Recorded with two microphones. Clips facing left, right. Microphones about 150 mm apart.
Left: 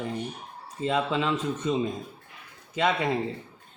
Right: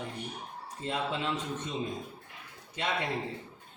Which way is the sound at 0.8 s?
90° left.